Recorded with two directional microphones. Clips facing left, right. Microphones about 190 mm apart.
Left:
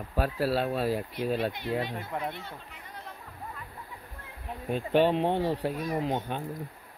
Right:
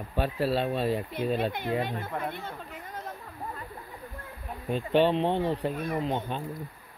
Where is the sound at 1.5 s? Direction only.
50° right (ahead or behind).